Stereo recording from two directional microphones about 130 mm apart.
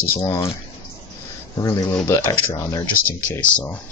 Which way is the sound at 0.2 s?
30° left (ahead or behind).